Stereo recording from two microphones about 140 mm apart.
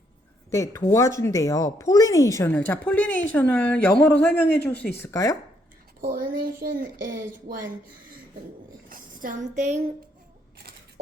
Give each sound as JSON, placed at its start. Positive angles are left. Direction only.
{"t": 0.5, "sound": "speech", "side_deg": 20}
{"t": 5.1, "sound": "speech", "side_deg": 25}
{"t": 6.0, "sound": "speech", "side_deg": -90}
{"t": 8.9, "sound": "a sound", "side_deg": -75}